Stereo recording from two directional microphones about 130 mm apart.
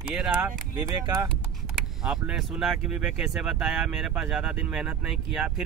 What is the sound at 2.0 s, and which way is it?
Speech, 5° right (ahead or behind).